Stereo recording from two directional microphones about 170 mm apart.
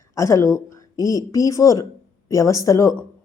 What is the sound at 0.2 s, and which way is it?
A man's voice, 20° left (ahead or behind).